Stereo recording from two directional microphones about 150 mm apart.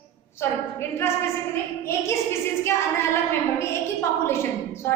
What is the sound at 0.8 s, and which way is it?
Speech, 15° left (ahead or behind).